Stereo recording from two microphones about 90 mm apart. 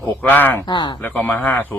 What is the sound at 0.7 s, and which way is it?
Speech, 55° left (ahead or behind).